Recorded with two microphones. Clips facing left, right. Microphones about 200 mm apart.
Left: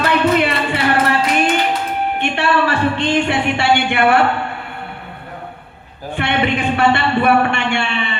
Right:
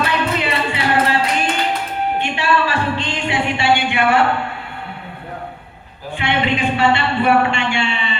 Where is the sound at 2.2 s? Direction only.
60° left (ahead or behind).